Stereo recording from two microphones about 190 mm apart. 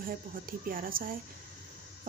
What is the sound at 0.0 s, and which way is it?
A woman's voice, 50° right (ahead or behind).